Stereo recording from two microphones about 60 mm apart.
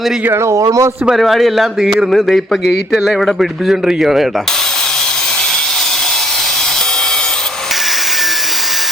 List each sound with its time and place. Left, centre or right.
0.4 s a man's voice: right
1.1 s a man's voice: centre